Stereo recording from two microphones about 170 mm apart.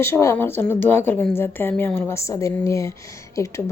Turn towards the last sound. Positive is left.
turn(degrees=20)  # may be behind; listen again after turning